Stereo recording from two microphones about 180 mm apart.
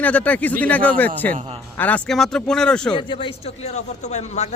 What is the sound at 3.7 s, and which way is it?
Speech, 40° left (ahead or behind).